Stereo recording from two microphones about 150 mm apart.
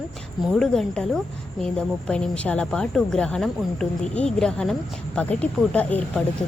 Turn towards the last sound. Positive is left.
turn(degrees=10)  # may be behind; listen again after turning